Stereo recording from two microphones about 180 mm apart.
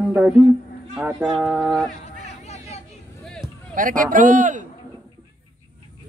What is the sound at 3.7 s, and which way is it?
Speech, 50° right (ahead or behind).